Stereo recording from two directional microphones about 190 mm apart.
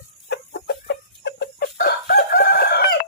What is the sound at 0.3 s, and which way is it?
Chicken, 60° left (ahead or behind).